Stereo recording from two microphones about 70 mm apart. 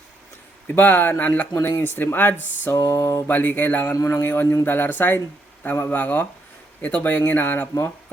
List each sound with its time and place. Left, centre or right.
0.8 s speech: left
1.5 s mantra: left
1.8 s speech: left
2.7 s mantra: left
3.2 s a man's voice: left